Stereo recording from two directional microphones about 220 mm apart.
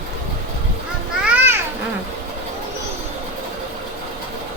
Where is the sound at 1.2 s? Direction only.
10° right (ahead or behind).